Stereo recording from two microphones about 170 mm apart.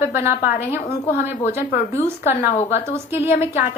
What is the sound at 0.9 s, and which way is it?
Speech, 40° left (ahead or behind).